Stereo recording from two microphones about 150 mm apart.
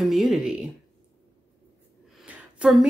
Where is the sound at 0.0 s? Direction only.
Centre (ahead or behind).